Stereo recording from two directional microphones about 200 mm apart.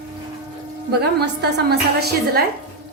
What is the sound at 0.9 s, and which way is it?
A woman's voice, 55° right (ahead or behind).